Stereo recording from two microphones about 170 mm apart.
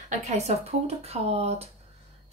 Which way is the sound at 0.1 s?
40° right (ahead or behind).